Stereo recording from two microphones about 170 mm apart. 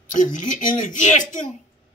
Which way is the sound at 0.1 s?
50° left (ahead or behind).